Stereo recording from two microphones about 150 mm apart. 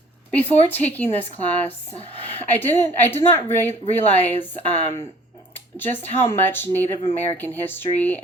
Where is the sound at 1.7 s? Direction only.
40° left (ahead or behind).